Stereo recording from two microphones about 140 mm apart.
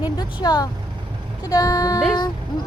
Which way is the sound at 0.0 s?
30° left (ahead or behind).